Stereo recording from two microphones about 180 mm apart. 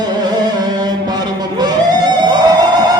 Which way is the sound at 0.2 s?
25° right (ahead or behind).